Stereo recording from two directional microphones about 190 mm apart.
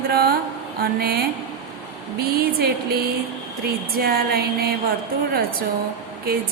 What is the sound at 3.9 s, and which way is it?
Speech, 55° right (ahead or behind).